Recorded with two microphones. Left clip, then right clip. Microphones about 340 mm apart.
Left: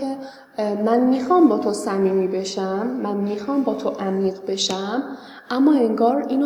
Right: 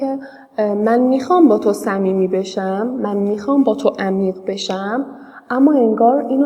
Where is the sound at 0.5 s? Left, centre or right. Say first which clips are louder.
Right 4 dB; right.